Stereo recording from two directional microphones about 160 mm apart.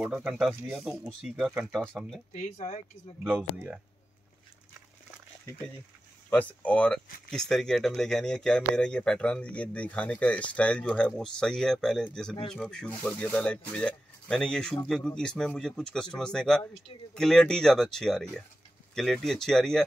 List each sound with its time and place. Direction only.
0.0 s speech: 10° right (ahead or behind)
2.3 s speech: 45° left (ahead or behind)
3.3 s speech: 5° right (ahead or behind)
6.3 s speech: 10° left (ahead or behind)